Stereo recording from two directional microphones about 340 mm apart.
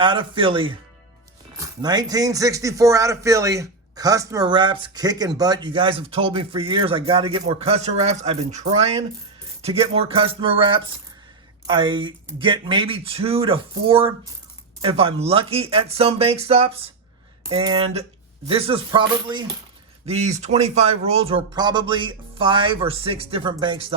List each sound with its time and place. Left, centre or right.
0.0 s a man's voice: centre